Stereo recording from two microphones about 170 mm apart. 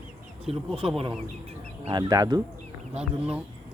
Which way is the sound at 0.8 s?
30° right (ahead or behind).